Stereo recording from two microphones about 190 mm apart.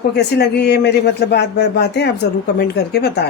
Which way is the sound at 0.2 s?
60° left (ahead or behind).